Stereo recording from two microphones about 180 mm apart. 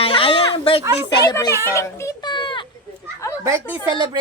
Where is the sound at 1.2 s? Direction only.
20° left (ahead or behind).